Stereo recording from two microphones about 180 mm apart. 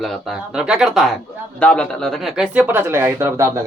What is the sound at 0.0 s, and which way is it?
Speech, centre (ahead or behind).